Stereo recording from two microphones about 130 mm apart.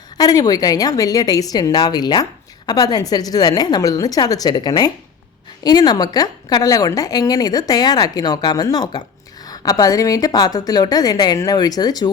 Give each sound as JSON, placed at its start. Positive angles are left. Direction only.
{"t": 0.2, "sound": "a woman's voice", "side_deg": 30}